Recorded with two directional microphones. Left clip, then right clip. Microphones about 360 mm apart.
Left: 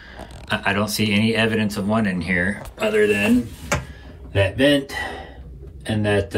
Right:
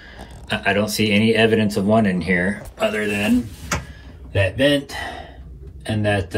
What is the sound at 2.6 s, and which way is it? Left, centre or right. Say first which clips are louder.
Speech: left 3 dB; centre.